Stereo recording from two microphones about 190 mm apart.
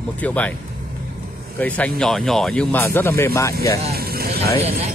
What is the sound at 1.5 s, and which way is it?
Speech, 5° left (ahead or behind).